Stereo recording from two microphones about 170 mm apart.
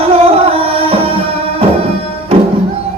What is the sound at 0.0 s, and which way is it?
Music, 35° right (ahead or behind).